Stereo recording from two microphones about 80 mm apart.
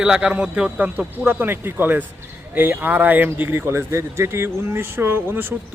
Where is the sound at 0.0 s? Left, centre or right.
Centre.